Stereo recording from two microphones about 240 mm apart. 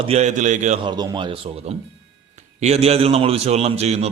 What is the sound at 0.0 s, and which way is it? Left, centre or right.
Speech, right.